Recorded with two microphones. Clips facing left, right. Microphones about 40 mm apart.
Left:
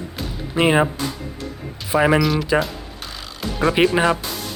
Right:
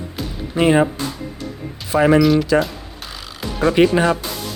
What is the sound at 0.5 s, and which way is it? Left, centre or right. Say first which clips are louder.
Speech: right 2 dB; centre.